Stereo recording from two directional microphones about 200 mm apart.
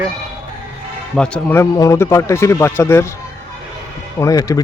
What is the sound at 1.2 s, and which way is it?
Speech, 10° left (ahead or behind).